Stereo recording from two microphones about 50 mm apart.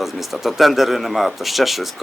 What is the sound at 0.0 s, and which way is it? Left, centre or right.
Speech, centre.